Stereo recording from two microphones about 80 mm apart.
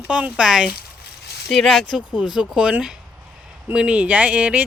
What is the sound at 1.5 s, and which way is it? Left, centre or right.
Speech, centre.